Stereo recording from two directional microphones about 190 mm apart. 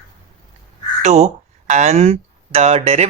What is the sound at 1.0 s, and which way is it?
Speech, 35° right (ahead or behind).